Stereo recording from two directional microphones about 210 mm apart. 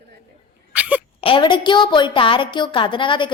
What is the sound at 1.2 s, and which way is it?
A woman's voice, 25° left (ahead or behind).